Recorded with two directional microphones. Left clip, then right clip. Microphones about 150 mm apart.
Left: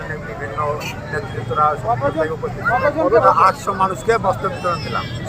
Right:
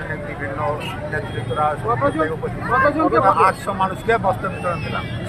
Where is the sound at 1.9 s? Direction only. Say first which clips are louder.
Left 1 dB; 60° right (ahead or behind).